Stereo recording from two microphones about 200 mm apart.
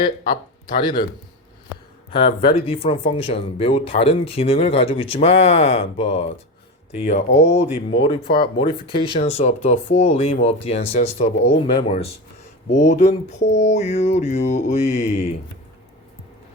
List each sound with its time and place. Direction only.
0.8 s speech: 20° left (ahead or behind)
2.0 s speech: 30° left (ahead or behind)